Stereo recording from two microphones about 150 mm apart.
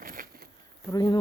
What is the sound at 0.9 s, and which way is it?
Speech, 25° left (ahead or behind).